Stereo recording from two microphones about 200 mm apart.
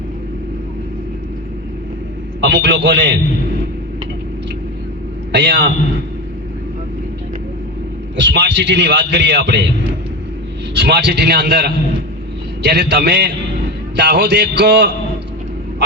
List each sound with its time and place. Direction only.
2.4 s a man's voice: 60° right (ahead or behind)
5.3 s a man's voice: 55° right (ahead or behind)
8.1 s a man's voice: 60° right (ahead or behind)
10.8 s a man's voice: 55° right (ahead or behind)